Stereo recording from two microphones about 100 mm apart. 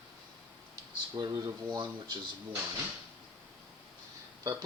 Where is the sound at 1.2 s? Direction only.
45° right (ahead or behind).